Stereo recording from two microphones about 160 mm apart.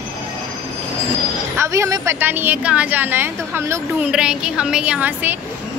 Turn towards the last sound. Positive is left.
turn(degrees=-10)  # may be behind; listen again after turning